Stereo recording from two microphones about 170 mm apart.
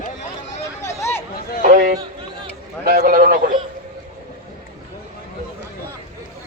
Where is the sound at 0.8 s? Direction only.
15° left (ahead or behind).